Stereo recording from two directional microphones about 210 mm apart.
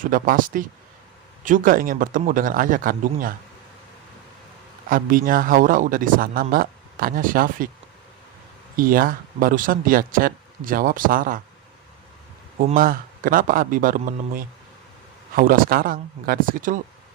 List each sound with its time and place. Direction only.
0.0 s a man's voice: 40° right (ahead or behind)
4.9 s a man's voice: 40° right (ahead or behind)
8.7 s a man's voice: 45° right (ahead or behind)
12.5 s a man's voice: 40° right (ahead or behind)